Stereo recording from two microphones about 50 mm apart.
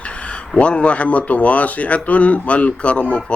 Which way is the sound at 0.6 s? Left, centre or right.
Left.